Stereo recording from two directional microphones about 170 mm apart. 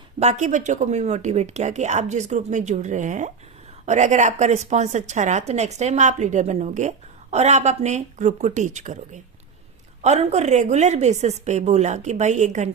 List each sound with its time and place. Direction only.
0.2 s a woman's voice: 45° right (ahead or behind)